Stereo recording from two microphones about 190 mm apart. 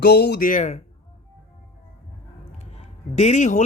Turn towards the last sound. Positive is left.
turn(degrees=40)  # may be behind; listen again after turning